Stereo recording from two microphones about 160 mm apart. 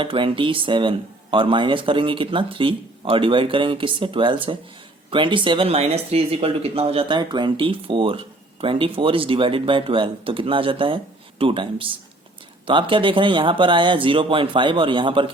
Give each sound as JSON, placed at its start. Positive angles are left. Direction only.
{"t": 0.0, "sound": "speech", "side_deg": -35}